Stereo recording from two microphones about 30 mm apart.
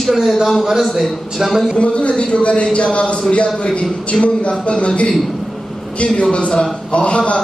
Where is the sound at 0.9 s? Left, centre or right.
Centre.